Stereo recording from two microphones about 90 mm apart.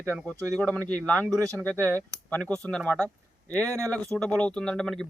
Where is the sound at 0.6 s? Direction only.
15° left (ahead or behind).